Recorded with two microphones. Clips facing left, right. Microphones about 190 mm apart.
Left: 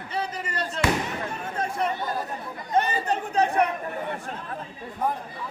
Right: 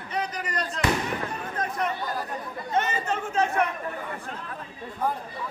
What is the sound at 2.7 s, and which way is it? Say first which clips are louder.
Speech: left 3 dB; 35° left (ahead or behind).